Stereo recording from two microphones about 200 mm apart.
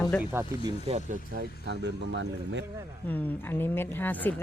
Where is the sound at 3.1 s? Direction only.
10° left (ahead or behind).